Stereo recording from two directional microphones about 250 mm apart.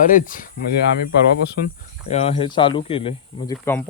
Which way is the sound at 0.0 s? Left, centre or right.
Left.